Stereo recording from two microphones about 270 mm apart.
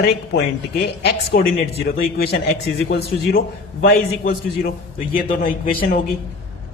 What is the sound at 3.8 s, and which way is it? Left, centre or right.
A man's voice, left.